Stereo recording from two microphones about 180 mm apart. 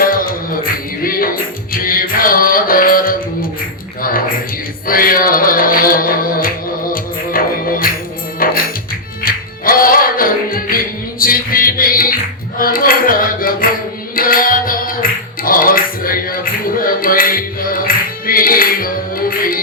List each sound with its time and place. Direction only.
0.0 s music: 50° left (ahead or behind)
1.0 s speech: 55° left (ahead or behind)
1.7 s music: 50° left (ahead or behind)
4.9 s music: 50° left (ahead or behind)
15.4 s a sound: 50° left (ahead or behind)